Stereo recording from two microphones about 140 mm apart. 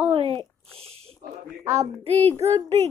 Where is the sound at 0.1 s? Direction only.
40° right (ahead or behind).